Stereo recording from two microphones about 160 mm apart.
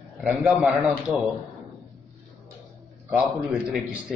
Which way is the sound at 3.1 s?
5° right (ahead or behind).